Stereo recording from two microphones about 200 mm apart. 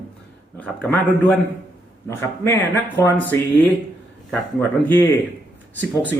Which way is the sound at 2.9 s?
10° left (ahead or behind).